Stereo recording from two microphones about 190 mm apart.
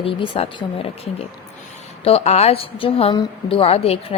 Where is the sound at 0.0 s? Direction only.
30° left (ahead or behind).